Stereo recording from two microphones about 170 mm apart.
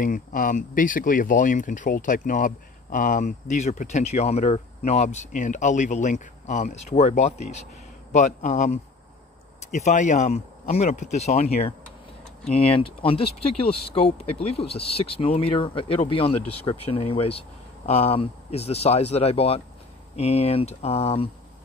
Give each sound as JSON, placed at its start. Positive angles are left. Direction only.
{"t": 0.0, "sound": "speech", "side_deg": 50}